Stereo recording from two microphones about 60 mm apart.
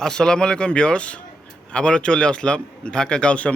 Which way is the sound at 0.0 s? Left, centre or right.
Centre.